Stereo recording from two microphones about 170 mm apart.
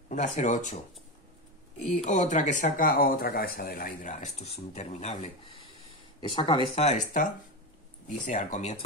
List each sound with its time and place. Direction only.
0.1 s speech: 45° left (ahead or behind)
1.8 s speech: 45° left (ahead or behind)
8.3 s speech: 45° left (ahead or behind)